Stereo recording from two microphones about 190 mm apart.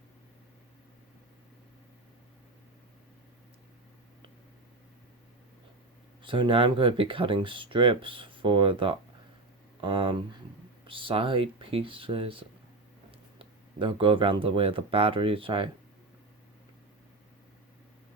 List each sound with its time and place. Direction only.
6.2 s speech: 25° right (ahead or behind)